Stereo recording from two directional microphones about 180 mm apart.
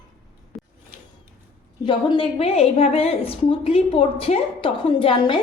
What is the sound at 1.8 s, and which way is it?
A woman's voice, 25° left (ahead or behind).